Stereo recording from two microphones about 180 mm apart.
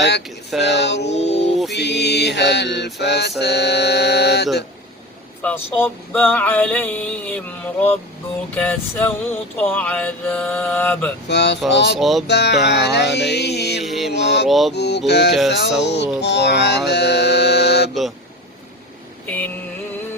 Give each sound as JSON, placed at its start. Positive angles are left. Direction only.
{"t": 0.6, "sound": "mantra", "side_deg": 70}
{"t": 1.0, "sound": "mantra", "side_deg": 35}
{"t": 1.7, "sound": "mantra", "side_deg": 70}
{"t": 5.4, "sound": "male singing", "side_deg": 10}
{"t": 11.3, "sound": "mantra", "side_deg": 70}
{"t": 11.9, "sound": "music", "side_deg": 0}
{"t": 12.3, "sound": "mantra", "side_deg": 70}
{"t": 13.3, "sound": "music", "side_deg": 65}
{"t": 13.8, "sound": "mantra", "side_deg": 0}
{"t": 14.1, "sound": "mantra", "side_deg": 70}
{"t": 14.4, "sound": "music", "side_deg": 0}
{"t": 14.7, "sound": "mantra", "side_deg": 70}
{"t": 19.2, "sound": "vehicle", "side_deg": 10}